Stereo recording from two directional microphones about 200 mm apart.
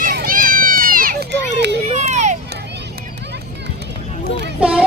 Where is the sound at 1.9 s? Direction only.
35° right (ahead or behind).